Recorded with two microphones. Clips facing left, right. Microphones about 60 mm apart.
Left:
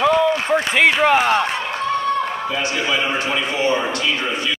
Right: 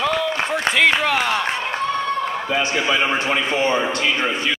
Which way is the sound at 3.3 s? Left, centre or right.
Right.